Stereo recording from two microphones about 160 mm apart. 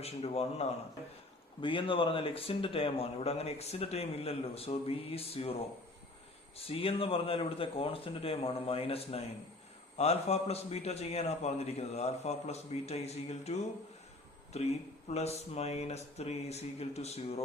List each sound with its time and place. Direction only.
0.0 s speech: 40° left (ahead or behind)